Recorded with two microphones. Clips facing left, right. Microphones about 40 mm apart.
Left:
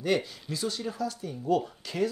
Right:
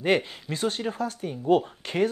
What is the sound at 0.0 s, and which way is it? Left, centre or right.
Speech, right.